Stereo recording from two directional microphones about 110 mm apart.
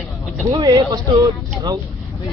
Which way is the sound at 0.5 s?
35° right (ahead or behind).